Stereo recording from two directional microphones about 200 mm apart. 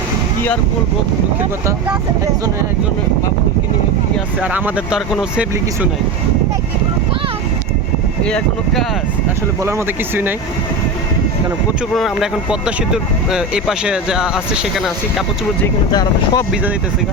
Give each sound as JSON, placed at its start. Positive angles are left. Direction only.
{"t": 4.4, "sound": "speech", "side_deg": -5}
{"t": 8.2, "sound": "speech", "side_deg": 5}
{"t": 9.6, "sound": "speech", "side_deg": -10}
{"t": 11.9, "sound": "speech", "side_deg": 0}
{"t": 15.6, "sound": "speech", "side_deg": 20}